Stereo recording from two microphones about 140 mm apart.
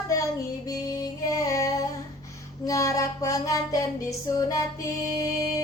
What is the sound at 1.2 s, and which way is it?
Music, 25° left (ahead or behind).